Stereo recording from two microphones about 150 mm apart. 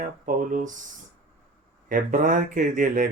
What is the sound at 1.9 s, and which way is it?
Speech, 60° right (ahead or behind).